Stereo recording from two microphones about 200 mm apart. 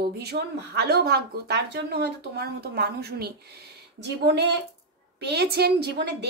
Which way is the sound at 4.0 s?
60° right (ahead or behind).